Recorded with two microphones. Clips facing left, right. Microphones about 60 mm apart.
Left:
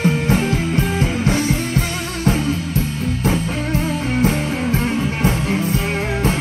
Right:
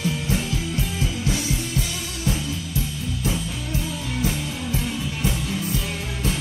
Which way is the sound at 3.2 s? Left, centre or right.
Left.